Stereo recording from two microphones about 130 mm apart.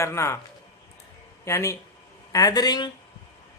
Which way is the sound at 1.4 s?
20° left (ahead or behind).